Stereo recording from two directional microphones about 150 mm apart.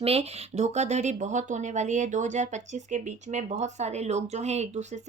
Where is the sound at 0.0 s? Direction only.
40° right (ahead or behind).